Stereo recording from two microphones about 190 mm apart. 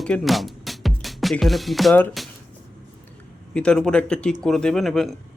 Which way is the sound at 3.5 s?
5° left (ahead or behind).